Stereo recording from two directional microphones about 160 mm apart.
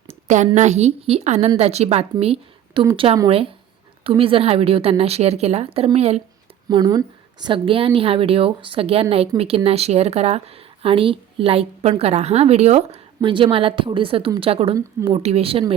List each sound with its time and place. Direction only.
0.3 s a woman's voice: 50° right (ahead or behind)
6.7 s a woman's voice: 25° right (ahead or behind)